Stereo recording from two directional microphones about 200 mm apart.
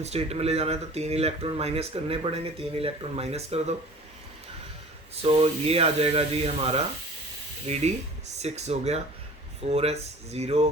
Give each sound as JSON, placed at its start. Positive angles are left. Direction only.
{"t": 0.0, "sound": "speech", "side_deg": -30}
{"t": 5.1, "sound": "speech", "side_deg": -30}